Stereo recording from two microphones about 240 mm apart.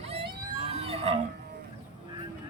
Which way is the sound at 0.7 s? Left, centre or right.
Right.